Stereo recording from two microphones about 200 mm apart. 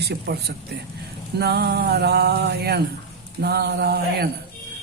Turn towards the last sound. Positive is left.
turn(degrees=-55)  # may be behind; listen again after turning